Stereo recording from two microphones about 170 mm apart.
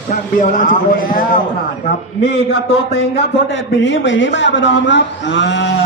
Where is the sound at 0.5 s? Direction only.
50° left (ahead or behind).